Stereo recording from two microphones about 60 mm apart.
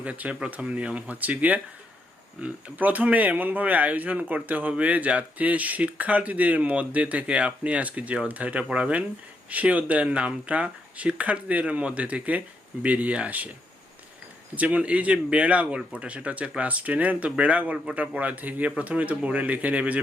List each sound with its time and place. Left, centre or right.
0.0 s speech: right
14.5 s speech: right